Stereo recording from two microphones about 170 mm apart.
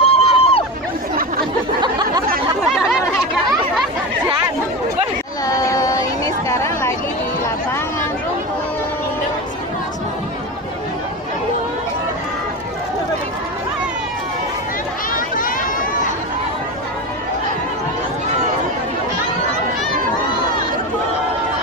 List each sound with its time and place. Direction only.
0.0 s hubbub: 35° left (ahead or behind)
5.5 s a sound: 20° left (ahead or behind)
15.1 s run: 55° left (ahead or behind)